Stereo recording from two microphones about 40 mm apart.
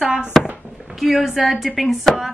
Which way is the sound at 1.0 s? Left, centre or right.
Centre.